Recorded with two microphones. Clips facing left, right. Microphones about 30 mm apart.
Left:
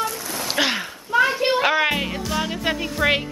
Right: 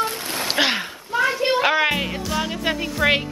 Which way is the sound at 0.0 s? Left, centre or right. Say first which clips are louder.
Right 2 dB; right.